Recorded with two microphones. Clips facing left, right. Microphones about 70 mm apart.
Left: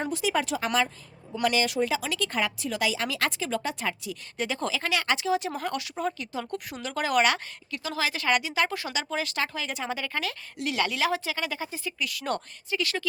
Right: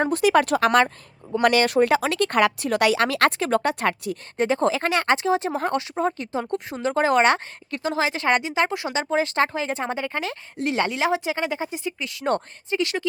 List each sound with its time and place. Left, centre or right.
0.0 s speech: right
4.4 s speech: right